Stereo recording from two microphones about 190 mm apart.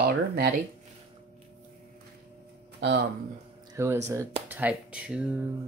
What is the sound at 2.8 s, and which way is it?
Speech, 70° right (ahead or behind).